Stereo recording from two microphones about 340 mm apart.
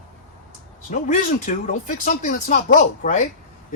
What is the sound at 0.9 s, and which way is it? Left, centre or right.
Speech, left.